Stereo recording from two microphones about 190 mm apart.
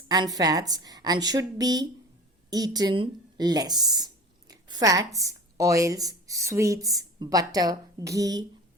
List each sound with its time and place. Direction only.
0.1 s a woman's voice: 20° right (ahead or behind)